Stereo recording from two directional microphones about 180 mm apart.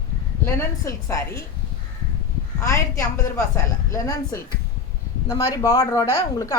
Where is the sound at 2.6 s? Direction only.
15° left (ahead or behind).